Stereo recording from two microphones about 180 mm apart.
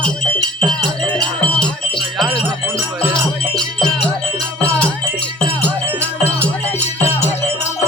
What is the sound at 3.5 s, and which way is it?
Music, 5° left (ahead or behind).